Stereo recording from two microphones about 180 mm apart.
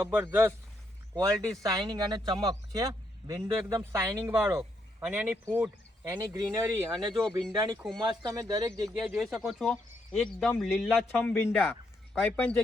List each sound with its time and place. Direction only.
0.0 s speech: 10° right (ahead or behind)
7.1 s speech: centre (ahead or behind)
7.5 s speech: 20° right (ahead or behind)
7.8 s speech: centre (ahead or behind)
8.0 s speech: 20° right (ahead or behind)
8.9 s speech: centre (ahead or behind)